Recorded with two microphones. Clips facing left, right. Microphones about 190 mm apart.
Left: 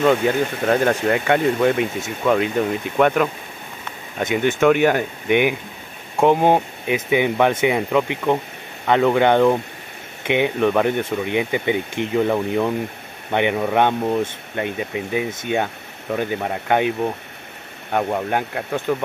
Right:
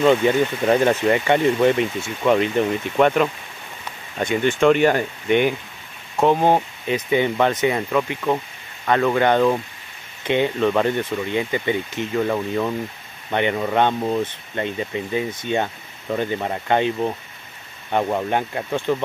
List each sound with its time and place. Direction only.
0.0 s speech: centre (ahead or behind)
4.5 s speech: 5° left (ahead or behind)